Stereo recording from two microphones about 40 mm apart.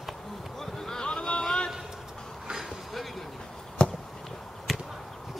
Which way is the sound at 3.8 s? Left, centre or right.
Left.